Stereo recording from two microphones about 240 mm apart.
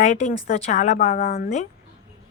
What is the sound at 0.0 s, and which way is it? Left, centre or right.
Speech, left.